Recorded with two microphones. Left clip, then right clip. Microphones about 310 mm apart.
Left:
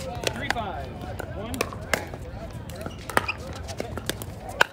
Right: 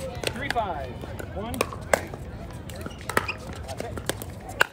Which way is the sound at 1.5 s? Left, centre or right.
Centre.